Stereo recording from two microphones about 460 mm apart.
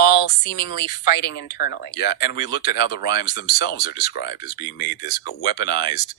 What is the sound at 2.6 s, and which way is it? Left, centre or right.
Speech, left.